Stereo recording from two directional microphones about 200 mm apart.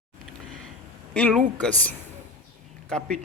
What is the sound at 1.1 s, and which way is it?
Speech, 5° left (ahead or behind).